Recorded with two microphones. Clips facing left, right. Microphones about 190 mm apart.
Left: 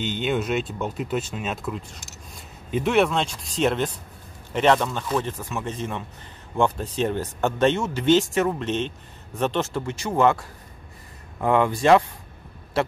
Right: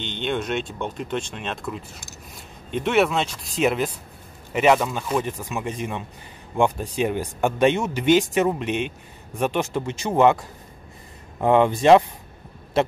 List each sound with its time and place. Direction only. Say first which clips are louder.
0.0 s speech: left 2 dB; 5° left (ahead or behind); by 10.4 s 20° right (ahead or behind)
11.4 s speech: right 3 dB; 20° right (ahead or behind)